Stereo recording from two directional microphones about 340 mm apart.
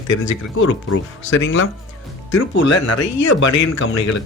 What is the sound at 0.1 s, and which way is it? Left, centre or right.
Speech, left.